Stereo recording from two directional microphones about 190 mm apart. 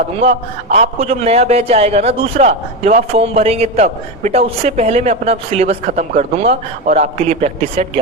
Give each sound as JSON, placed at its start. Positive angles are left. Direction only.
{"t": 0.2, "sound": "a man's voice", "side_deg": -35}